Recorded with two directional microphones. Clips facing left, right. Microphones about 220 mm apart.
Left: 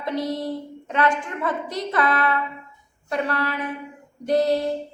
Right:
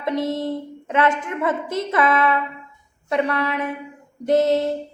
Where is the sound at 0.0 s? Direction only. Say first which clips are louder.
Right 3 dB; 25° right (ahead or behind).